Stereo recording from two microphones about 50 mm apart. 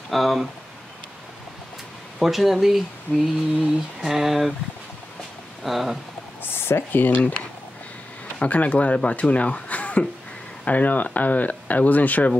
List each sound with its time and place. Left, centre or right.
0.1 s speech: centre
2.1 s speech: centre
5.6 s speech: centre
6.4 s speech: left
7.2 s speech: left